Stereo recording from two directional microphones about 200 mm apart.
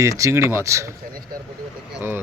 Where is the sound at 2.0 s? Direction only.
10° right (ahead or behind).